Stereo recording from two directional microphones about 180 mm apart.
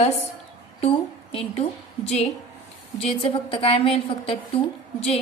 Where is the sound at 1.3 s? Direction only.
30° left (ahead or behind).